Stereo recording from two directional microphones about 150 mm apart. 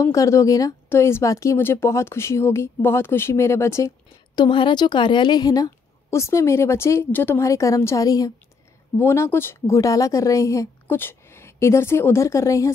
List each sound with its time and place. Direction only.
0.0 s speech: 20° left (ahead or behind)
4.4 s a woman's voice: 30° left (ahead or behind)